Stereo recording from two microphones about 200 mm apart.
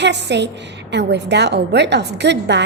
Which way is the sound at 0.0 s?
60° right (ahead or behind).